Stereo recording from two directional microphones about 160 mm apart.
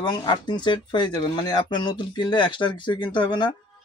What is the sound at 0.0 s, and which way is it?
Speech, 25° left (ahead or behind).